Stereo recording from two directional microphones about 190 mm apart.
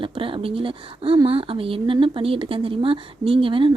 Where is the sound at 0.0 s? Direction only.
25° right (ahead or behind).